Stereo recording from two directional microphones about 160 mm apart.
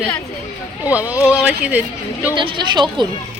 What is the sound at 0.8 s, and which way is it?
Speech, 10° right (ahead or behind).